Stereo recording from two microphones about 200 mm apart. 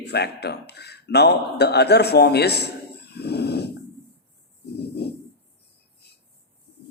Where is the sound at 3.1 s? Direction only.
55° left (ahead or behind).